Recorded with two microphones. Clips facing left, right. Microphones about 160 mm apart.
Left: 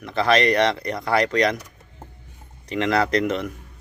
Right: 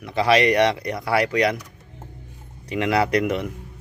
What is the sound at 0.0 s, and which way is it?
Speech, 10° right (ahead or behind).